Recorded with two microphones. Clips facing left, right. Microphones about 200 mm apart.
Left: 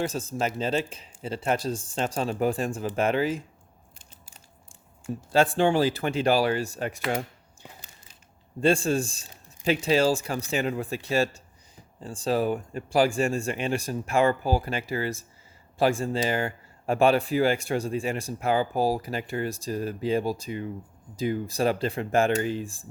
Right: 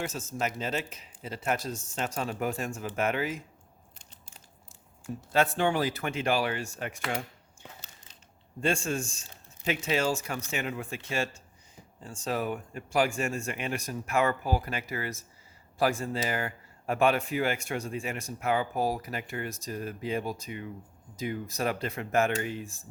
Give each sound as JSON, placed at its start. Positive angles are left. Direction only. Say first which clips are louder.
{"t": 0.0, "sound": "speech", "louder": "left 5 dB", "side_deg": 35}
{"t": 5.3, "sound": "speech", "louder": "left 5 dB", "side_deg": 30}
{"t": 8.6, "sound": "speech", "louder": "left 7 dB", "side_deg": 35}